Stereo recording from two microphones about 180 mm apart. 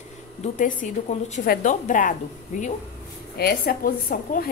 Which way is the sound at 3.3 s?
55° left (ahead or behind).